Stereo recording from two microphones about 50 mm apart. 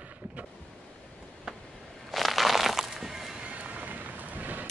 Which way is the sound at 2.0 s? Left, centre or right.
Centre.